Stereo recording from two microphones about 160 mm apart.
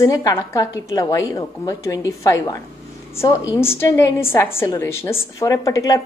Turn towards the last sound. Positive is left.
turn(degrees=20)  # may be behind; listen again after turning